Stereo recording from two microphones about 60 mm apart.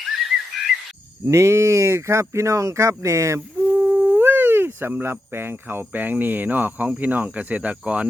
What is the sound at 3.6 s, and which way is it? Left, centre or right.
Speech, right.